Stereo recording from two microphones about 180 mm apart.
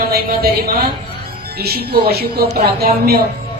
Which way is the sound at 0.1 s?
60° right (ahead or behind).